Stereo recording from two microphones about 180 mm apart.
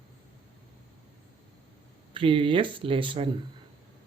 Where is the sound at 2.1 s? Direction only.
30° right (ahead or behind).